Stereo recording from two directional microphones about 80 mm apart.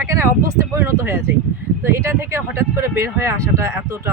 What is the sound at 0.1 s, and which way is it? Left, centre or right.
Speech, right.